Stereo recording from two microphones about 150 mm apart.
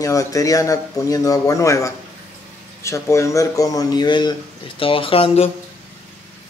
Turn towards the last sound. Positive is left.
turn(degrees=40)  # may be behind; listen again after turning